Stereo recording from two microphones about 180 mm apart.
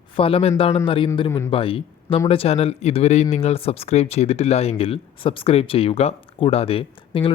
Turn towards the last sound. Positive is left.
turn(degrees=30)  # may be behind; listen again after turning